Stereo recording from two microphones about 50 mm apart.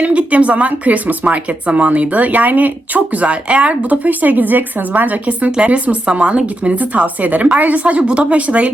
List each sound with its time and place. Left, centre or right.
0.0 s speech: right
5.5 s speech: right